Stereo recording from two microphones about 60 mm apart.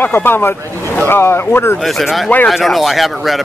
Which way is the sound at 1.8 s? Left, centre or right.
Centre.